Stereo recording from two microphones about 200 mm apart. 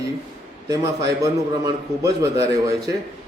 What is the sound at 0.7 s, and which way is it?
Speech, 15° right (ahead or behind).